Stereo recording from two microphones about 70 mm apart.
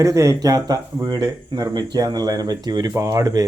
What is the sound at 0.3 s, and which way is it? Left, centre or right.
Speech, right.